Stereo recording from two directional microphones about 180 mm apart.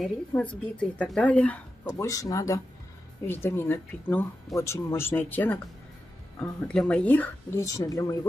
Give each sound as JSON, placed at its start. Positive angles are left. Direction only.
{"t": 0.3, "sound": "speech", "side_deg": 5}
{"t": 1.9, "sound": "speech", "side_deg": 20}